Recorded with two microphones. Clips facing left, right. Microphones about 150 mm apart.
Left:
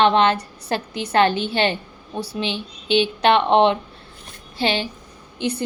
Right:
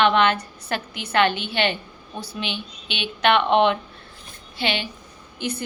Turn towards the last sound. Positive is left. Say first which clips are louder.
# left 4 dB
turn(degrees=30)  # may be behind; listen again after turning